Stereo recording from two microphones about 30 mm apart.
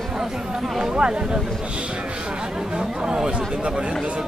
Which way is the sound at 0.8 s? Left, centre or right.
Right.